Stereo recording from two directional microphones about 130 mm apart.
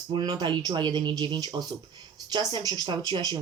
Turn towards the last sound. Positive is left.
turn(degrees=-35)  # may be behind; listen again after turning